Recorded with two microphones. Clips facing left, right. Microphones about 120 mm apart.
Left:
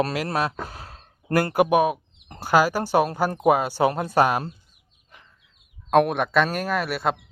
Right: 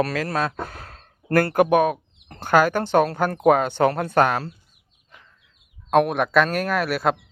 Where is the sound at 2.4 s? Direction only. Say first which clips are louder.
Right 2 dB; 5° left (ahead or behind).